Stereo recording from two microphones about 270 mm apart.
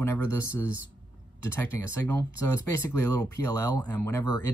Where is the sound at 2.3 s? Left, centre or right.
Right.